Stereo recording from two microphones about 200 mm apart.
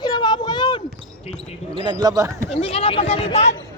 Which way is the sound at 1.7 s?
25° right (ahead or behind).